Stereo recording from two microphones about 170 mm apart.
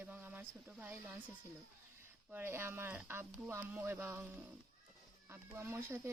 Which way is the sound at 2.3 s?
15° right (ahead or behind).